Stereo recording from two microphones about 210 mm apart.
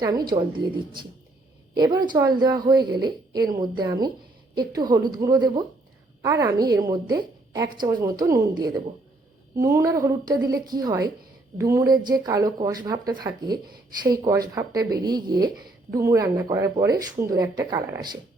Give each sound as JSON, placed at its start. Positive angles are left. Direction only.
{"t": 0.0, "sound": "a woman's voice", "side_deg": -20}